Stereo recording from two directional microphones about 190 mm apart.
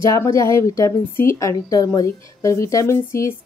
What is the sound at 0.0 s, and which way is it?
A woman's voice, 15° left (ahead or behind).